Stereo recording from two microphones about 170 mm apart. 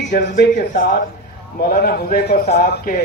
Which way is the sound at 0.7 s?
60° left (ahead or behind).